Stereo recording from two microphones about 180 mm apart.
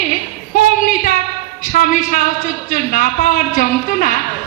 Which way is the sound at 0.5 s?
45° left (ahead or behind).